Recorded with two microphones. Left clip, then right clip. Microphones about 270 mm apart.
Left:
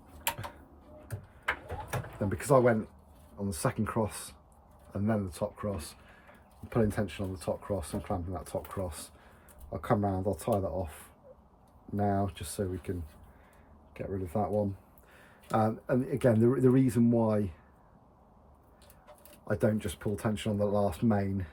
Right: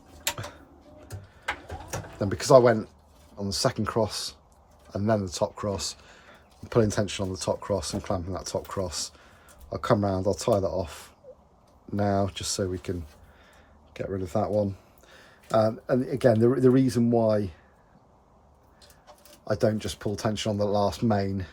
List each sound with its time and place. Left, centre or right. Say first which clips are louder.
2.2 s speech: right 7 dB; centre
11.9 s speech: right 5 dB; right
13.9 s speech: right 5 dB; right
15.4 s speech: right 6 dB; centre
19.5 s speech: right 5 dB; centre